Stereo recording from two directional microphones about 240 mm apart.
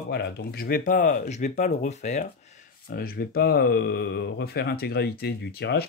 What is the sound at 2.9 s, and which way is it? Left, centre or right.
Speech, left.